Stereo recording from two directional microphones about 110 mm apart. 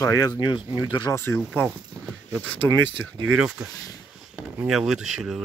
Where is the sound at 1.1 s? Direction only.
20° left (ahead or behind).